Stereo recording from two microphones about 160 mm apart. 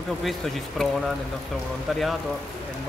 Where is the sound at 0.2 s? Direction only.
Centre (ahead or behind).